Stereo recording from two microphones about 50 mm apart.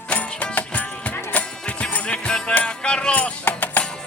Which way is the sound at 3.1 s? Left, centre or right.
Left.